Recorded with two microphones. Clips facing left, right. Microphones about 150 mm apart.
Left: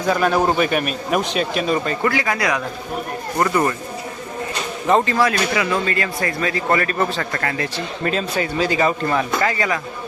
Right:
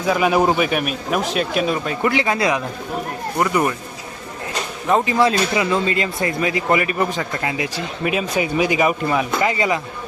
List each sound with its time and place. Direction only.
0.0 s a man's voice: 5° right (ahead or behind)
2.0 s speech: 20° right (ahead or behind)
3.3 s speech: 10° right (ahead or behind)
5.0 s speech: 20° right (ahead or behind)
9.5 s speech: 20° right (ahead or behind)